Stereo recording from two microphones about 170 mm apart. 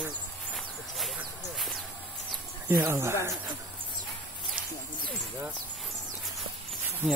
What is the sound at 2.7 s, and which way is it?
Speech, 15° right (ahead or behind).